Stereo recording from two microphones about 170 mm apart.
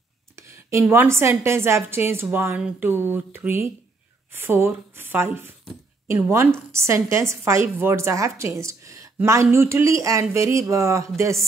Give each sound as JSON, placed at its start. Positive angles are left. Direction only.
{"t": 0.4, "sound": "a woman's voice", "side_deg": -15}